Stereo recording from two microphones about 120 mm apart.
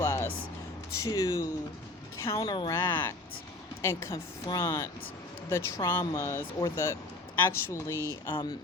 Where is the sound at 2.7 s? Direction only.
20° left (ahead or behind).